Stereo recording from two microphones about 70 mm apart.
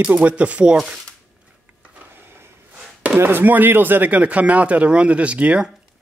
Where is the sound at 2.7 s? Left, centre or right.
Centre.